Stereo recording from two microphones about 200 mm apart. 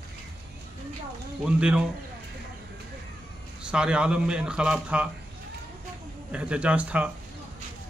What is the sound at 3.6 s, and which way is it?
Speech, 5° right (ahead or behind).